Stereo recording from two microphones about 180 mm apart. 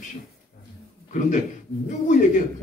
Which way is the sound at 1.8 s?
45° left (ahead or behind).